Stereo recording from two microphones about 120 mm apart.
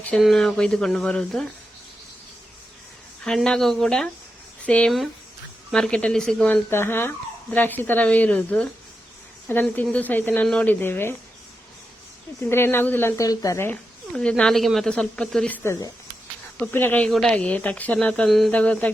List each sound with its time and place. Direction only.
0.2 s speech: 5° left (ahead or behind)
3.2 s speech: 5° left (ahead or behind)
6.7 s speech: 20° left (ahead or behind)
12.5 s a woman's voice: 20° left (ahead or behind)
14.1 s speech: 10° left (ahead or behind)
17.1 s speech: 5° left (ahead or behind)
18.5 s speech: 10° left (ahead or behind)